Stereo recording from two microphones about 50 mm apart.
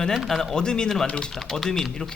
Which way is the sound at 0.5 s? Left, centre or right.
Centre.